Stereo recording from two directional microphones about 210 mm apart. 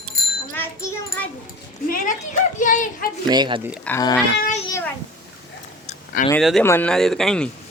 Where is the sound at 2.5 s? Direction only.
40° left (ahead or behind).